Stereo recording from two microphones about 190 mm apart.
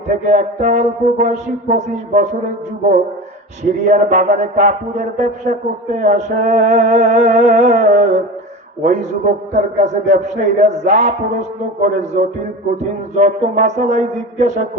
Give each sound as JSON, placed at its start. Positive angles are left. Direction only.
{"t": 0.3, "sound": "music", "side_deg": -40}
{"t": 3.6, "sound": "music", "side_deg": -40}